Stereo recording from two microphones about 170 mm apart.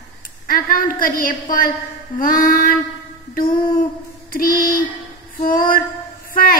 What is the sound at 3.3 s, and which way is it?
A woman's voice, 55° left (ahead or behind).